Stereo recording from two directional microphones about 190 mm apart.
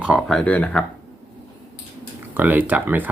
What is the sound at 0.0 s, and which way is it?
Speech, 5° right (ahead or behind).